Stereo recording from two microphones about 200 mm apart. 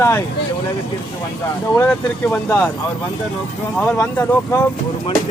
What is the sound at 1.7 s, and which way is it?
Speech, 10° left (ahead or behind).